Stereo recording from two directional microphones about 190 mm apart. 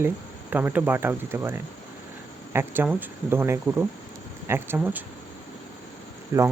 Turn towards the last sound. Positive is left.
turn(degrees=-15)  # may be behind; listen again after turning